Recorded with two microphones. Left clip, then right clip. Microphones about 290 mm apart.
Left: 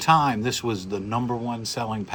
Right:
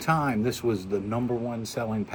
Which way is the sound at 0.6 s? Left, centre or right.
Left.